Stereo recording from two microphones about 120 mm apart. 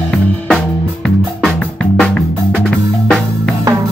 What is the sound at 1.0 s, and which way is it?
Music, 5° left (ahead or behind).